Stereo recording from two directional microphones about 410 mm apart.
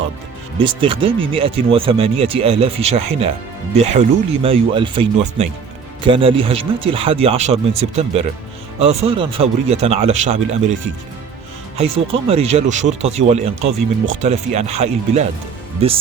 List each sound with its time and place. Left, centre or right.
0.6 s speech: centre
12.3 s speech: centre